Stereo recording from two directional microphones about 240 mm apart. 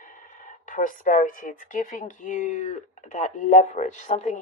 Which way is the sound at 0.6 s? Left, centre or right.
Left.